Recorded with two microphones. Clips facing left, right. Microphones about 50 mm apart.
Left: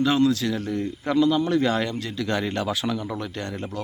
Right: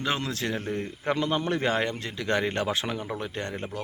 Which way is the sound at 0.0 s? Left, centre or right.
Right.